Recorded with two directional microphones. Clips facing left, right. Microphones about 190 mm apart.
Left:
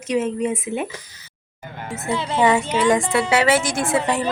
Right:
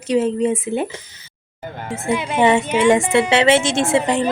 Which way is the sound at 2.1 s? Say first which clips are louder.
Right 2 dB; 15° right (ahead or behind).